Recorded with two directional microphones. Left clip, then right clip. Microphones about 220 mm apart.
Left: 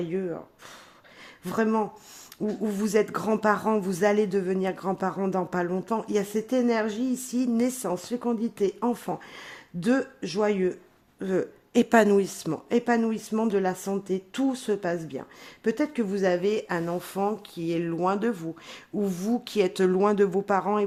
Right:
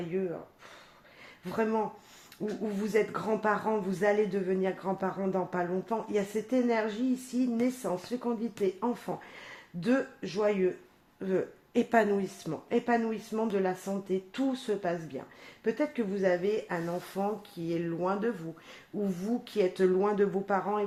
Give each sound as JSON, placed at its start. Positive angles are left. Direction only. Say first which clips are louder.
{"t": 0.1, "sound": "speech", "louder": "even", "side_deg": 45}
{"t": 1.5, "sound": "speech", "louder": "left 4 dB", "side_deg": 45}